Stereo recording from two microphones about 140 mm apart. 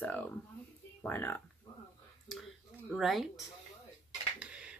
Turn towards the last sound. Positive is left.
turn(degrees=-5)  # may be behind; listen again after turning